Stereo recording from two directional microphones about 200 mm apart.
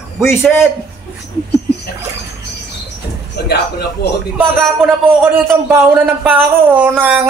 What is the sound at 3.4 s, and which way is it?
Speech, 55° left (ahead or behind).